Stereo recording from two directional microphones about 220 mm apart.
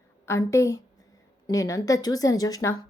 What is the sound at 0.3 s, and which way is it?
A woman's voice, 15° left (ahead or behind).